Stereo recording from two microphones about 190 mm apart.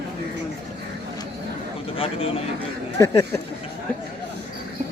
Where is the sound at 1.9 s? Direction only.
30° left (ahead or behind).